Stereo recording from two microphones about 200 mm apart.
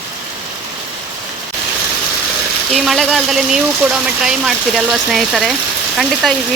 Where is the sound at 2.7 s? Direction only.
Centre (ahead or behind).